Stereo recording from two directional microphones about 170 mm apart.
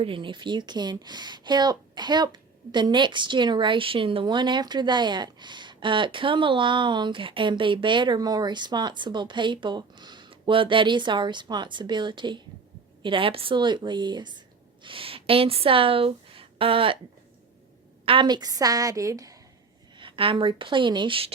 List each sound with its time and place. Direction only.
0.0 s a woman's voice: 30° right (ahead or behind)
18.0 s speech: 30° right (ahead or behind)
20.0 s speech: 30° right (ahead or behind)